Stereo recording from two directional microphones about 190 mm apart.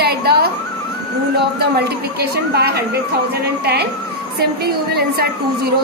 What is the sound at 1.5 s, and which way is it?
A woman's voice, 55° right (ahead or behind).